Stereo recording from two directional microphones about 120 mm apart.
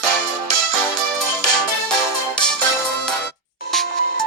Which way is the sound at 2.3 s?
10° left (ahead or behind).